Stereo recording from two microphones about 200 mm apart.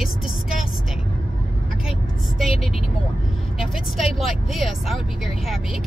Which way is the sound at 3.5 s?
Centre (ahead or behind).